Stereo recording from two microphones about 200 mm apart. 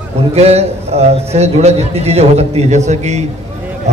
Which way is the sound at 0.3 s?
30° right (ahead or behind).